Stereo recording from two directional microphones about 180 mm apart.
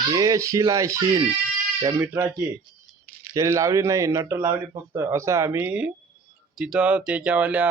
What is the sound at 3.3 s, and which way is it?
Speech, 15° right (ahead or behind).